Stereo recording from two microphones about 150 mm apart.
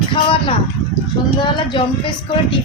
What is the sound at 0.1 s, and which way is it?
Speech, 35° left (ahead or behind).